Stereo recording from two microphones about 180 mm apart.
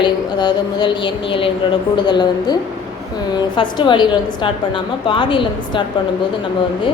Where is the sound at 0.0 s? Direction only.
25° left (ahead or behind).